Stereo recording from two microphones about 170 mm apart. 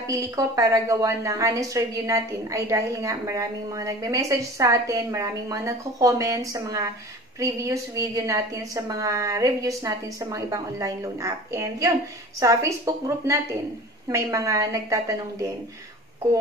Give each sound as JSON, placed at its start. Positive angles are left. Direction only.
{"t": 0.0, "sound": "a woman's voice", "side_deg": -20}